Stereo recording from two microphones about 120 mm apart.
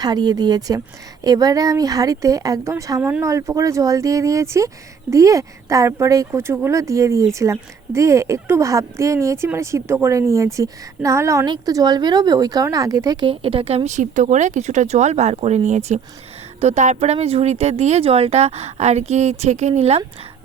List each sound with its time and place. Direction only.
0.0 s speech: 35° right (ahead or behind)
13.2 s speech: 50° right (ahead or behind); by 20.0 s 65° right (ahead or behind)